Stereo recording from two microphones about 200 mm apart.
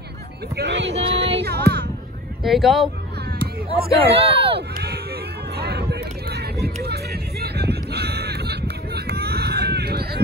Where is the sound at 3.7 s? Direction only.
30° right (ahead or behind).